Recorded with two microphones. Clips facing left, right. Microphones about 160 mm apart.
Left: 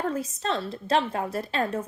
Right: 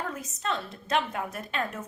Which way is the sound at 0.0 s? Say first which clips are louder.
Left 6 dB; 30° left (ahead or behind).